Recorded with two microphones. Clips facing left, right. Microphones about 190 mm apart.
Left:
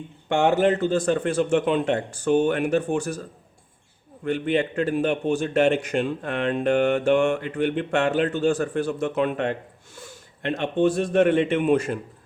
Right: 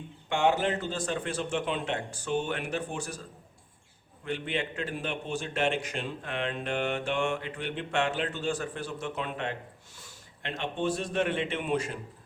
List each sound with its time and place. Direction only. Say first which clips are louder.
0.3 s a man's voice: left 7 dB; 50° left (ahead or behind)
4.2 s a man's voice: left 10 dB; 50° left (ahead or behind)